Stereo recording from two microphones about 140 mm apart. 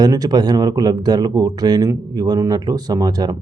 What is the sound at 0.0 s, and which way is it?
Speech, 30° right (ahead or behind).